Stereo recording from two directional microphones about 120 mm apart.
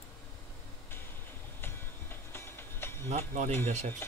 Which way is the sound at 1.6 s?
20° left (ahead or behind).